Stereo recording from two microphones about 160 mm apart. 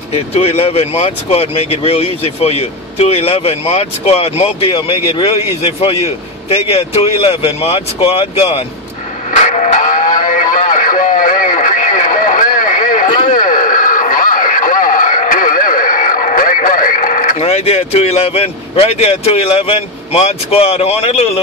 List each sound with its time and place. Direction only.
0.1 s speech: 40° left (ahead or behind)
9.3 s music: 45° left (ahead or behind)
13.3 s radio: 55° left (ahead or behind)
17.4 s speech: 40° left (ahead or behind)